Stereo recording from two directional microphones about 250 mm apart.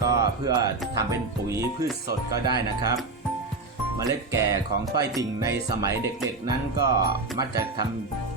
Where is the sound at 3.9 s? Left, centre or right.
Centre.